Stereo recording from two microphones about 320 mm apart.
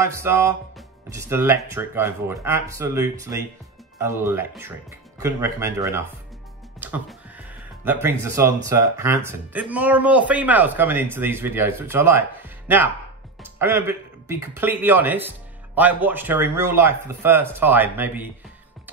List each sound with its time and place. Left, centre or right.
0.0 s speech: centre
6.8 s music: centre
8.6 s speech: centre